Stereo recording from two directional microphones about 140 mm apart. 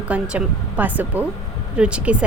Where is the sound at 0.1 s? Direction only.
10° right (ahead or behind).